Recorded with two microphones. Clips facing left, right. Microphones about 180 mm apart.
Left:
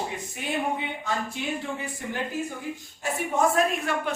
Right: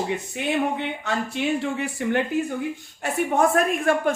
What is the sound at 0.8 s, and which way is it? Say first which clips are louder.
Speech: right 3 dB; 75° right (ahead or behind).